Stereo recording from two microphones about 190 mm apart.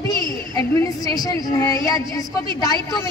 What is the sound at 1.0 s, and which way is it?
A woman's voice, 20° left (ahead or behind).